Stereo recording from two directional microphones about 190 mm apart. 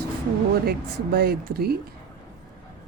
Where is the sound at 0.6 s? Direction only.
55° right (ahead or behind).